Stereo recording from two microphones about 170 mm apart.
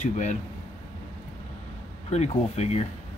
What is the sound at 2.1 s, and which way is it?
Speech, 40° left (ahead or behind).